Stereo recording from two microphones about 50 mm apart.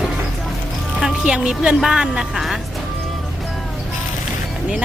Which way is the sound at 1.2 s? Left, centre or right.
Centre.